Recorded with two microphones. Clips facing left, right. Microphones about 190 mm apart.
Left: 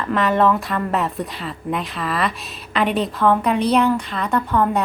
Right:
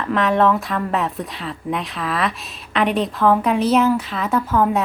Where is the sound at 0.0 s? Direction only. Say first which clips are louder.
Even; centre (ahead or behind).